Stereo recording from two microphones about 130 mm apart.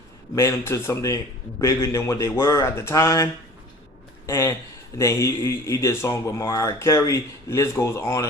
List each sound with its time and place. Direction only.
0.3 s speech: 20° left (ahead or behind)
4.3 s speech: 20° left (ahead or behind)